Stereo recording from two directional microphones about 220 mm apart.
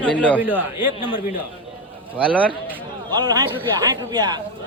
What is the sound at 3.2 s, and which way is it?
Speech, 20° right (ahead or behind).